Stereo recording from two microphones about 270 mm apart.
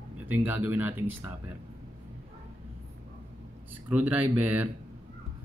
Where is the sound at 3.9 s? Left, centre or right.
Centre.